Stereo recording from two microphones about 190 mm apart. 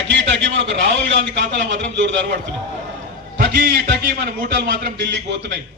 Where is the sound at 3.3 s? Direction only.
50° right (ahead or behind); by 5.6 s 65° right (ahead or behind).